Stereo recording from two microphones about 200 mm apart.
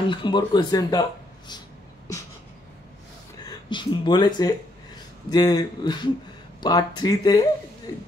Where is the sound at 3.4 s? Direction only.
25° left (ahead or behind).